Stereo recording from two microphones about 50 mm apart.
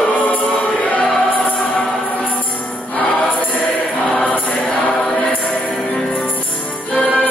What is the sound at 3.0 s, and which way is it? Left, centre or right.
Music, left.